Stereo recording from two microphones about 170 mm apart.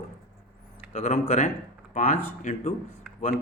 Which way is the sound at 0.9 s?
40° left (ahead or behind).